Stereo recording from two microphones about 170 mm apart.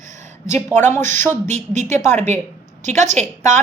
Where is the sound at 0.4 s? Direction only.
45° right (ahead or behind).